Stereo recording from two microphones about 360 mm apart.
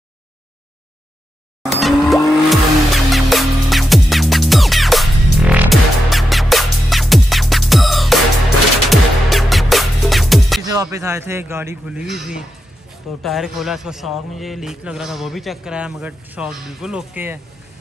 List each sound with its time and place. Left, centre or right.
1.7 s music: centre
10.6 s a man's voice: centre